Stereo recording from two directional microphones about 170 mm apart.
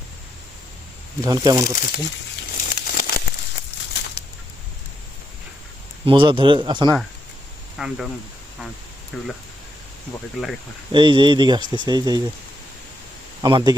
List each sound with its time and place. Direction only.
1.2 s speech: 20° right (ahead or behind)
1.6 s speech: 55° left (ahead or behind)
2.6 s crumpling: 55° left (ahead or behind)
6.1 s speech: 30° right (ahead or behind)
7.8 s speech: centre (ahead or behind)
9.1 s speech: centre (ahead or behind)
10.9 s speech: 30° right (ahead or behind)
13.4 s speech: 25° right (ahead or behind)